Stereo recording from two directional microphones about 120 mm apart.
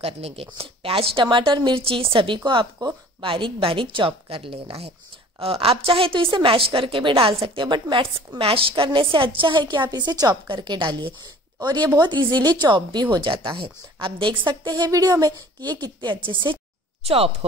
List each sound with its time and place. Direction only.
0.0 s a woman's voice: 55° right (ahead or behind); by 16.2 s 35° right (ahead or behind)
17.0 s speech: 55° right (ahead or behind)